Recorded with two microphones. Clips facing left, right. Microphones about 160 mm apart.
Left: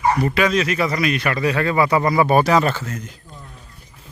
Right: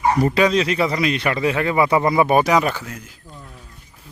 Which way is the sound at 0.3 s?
25° right (ahead or behind).